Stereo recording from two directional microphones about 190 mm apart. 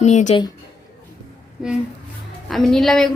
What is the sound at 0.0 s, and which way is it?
Speech, 40° left (ahead or behind).